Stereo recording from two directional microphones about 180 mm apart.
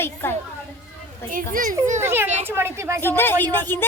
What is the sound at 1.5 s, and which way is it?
Speech, 50° right (ahead or behind).